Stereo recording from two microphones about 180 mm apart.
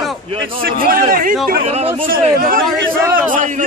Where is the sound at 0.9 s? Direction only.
50° right (ahead or behind).